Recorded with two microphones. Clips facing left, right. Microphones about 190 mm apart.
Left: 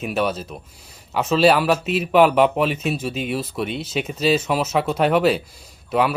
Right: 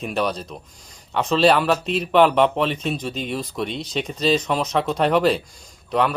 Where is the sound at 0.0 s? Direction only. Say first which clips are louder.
Left 1 dB; 5° left (ahead or behind).